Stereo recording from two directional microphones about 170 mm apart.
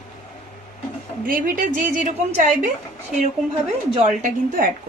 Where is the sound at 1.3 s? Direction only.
55° right (ahead or behind).